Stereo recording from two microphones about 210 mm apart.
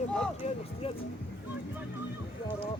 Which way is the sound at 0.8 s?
25° left (ahead or behind).